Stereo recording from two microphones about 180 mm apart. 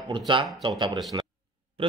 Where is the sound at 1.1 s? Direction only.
20° right (ahead or behind).